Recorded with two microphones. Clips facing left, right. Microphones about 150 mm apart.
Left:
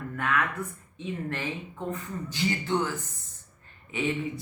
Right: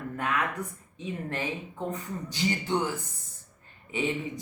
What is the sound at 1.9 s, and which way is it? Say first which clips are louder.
Speech: left 1 dB; 20° right (ahead or behind).